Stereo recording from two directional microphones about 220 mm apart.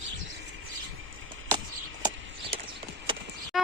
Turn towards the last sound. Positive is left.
turn(degrees=0)  # may be behind; listen again after turning